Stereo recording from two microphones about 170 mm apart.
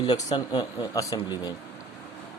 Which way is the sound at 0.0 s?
20° left (ahead or behind).